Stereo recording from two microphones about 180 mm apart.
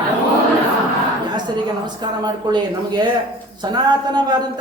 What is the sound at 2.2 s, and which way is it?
Speech, 25° right (ahead or behind).